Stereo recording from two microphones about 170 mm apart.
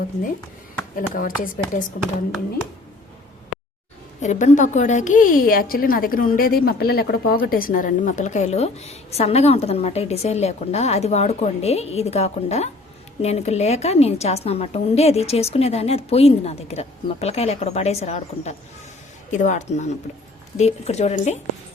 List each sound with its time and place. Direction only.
0.9 s a woman's voice: 55° left (ahead or behind)
4.2 s a woman's voice: 45° left (ahead or behind)